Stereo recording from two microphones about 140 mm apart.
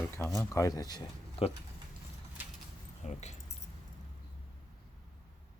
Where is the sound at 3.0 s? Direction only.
55° left (ahead or behind).